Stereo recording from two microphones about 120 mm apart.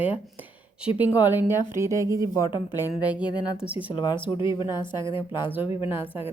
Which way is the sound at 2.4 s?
40° left (ahead or behind).